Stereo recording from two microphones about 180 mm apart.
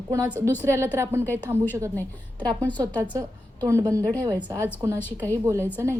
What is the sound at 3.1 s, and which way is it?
Speech, 20° right (ahead or behind).